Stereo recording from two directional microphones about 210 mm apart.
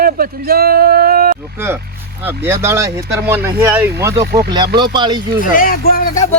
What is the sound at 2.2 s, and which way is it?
Speech, 10° right (ahead or behind).